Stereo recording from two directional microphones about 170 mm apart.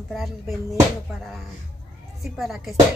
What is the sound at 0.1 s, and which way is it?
Speech, centre (ahead or behind).